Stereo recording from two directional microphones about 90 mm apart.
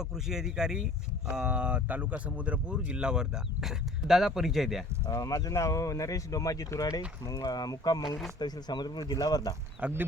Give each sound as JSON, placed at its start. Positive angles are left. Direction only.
{"t": 0.0, "sound": "speech", "side_deg": -5}
{"t": 5.0, "sound": "speech", "side_deg": 40}
{"t": 9.8, "sound": "speech", "side_deg": -15}